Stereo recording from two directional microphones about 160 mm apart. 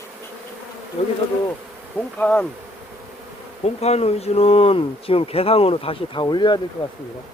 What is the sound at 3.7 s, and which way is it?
Speech, 40° left (ahead or behind).